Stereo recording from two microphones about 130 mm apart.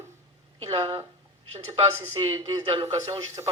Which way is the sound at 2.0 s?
25° right (ahead or behind).